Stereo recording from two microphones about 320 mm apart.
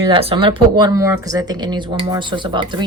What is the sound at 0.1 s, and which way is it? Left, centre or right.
Speech, centre.